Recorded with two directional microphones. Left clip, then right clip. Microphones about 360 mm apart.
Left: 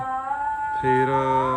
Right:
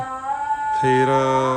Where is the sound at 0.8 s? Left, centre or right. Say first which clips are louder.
Right 3 dB; centre.